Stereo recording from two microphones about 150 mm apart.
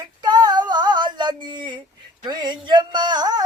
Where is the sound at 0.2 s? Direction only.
30° right (ahead or behind).